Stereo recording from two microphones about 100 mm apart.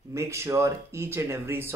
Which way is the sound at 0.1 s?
30° right (ahead or behind).